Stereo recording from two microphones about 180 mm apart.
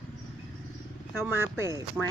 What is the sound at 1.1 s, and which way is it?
Speech, 15° right (ahead or behind).